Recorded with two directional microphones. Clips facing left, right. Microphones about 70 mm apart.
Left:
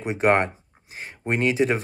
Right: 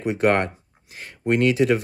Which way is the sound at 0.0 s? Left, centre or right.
Left.